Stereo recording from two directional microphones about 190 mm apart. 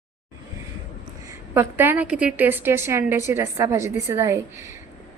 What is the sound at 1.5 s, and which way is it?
A woman's voice, 10° right (ahead or behind).